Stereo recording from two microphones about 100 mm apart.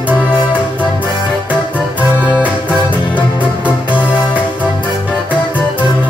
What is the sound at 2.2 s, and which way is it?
Music, 15° right (ahead or behind).